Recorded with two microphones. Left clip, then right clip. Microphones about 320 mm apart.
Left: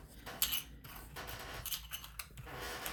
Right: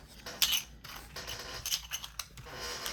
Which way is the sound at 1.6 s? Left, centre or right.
Centre.